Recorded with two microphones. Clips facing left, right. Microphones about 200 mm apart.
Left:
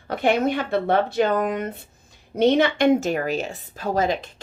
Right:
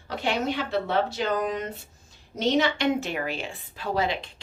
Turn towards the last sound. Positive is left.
turn(degrees=45)  # may be behind; listen again after turning